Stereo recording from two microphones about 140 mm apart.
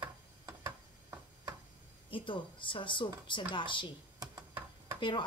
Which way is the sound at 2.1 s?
35° left (ahead or behind).